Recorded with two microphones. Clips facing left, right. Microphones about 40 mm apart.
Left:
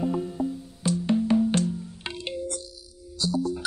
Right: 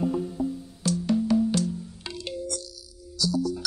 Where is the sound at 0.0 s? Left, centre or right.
Centre.